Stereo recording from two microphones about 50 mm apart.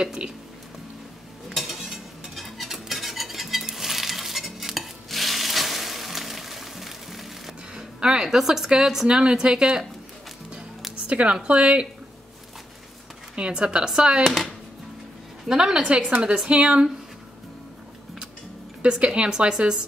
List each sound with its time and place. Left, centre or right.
0.0 s speech: centre
1.5 s cutlery: centre
1.8 s a sound: centre
2.3 s cutlery: centre
7.7 s speech: centre
11.1 s a woman's voice: right
13.4 s a woman's voice: centre
14.2 s speech: centre
15.4 s a woman's voice: centre
18.8 s a woman's voice: right